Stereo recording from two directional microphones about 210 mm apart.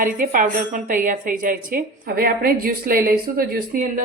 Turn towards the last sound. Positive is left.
turn(degrees=-45)  # may be behind; listen again after turning